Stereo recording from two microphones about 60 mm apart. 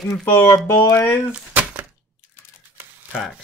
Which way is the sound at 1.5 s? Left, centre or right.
Right.